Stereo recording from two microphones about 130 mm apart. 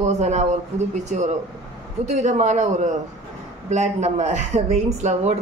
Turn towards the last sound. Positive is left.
turn(degrees=-60)  # may be behind; listen again after turning